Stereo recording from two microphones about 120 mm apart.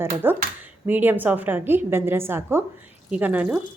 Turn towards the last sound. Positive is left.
turn(degrees=-15)  # may be behind; listen again after turning